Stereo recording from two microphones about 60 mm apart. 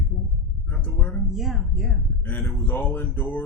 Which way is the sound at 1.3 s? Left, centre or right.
Centre.